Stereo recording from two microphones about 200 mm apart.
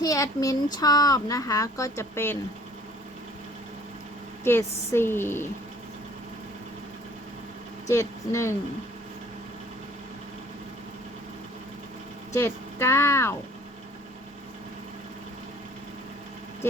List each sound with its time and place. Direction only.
0.0 s speech: 15° left (ahead or behind)
4.4 s speech: 10° left (ahead or behind)
7.9 s speech: 15° left (ahead or behind)
12.3 s speech: 15° left (ahead or behind)